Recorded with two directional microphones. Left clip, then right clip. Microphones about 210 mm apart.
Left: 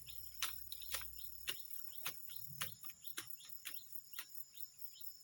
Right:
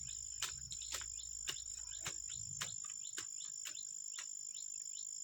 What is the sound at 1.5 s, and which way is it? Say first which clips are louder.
Cricket: even; 5° left (ahead or behind).